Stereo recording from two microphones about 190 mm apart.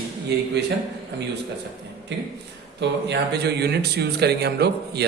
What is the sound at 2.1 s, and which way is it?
Speech, 70° right (ahead or behind).